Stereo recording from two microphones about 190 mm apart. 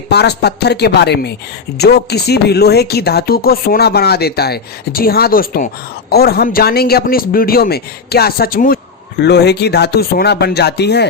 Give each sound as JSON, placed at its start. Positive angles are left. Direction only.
{"t": 0.1, "sound": "speech", "side_deg": 60}
{"t": 9.2, "sound": "speech", "side_deg": 60}